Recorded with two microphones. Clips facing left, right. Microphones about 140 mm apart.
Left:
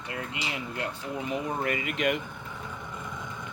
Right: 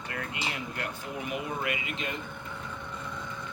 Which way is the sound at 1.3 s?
40° left (ahead or behind).